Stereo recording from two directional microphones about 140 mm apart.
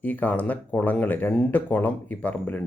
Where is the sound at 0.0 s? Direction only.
10° left (ahead or behind).